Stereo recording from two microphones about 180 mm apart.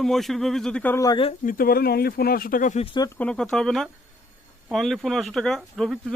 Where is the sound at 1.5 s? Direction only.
55° left (ahead or behind).